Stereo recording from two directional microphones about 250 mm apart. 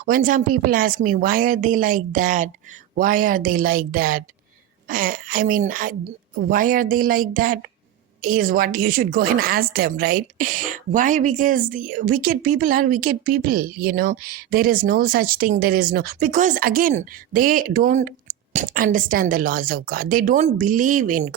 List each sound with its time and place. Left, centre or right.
0.0 s speech: right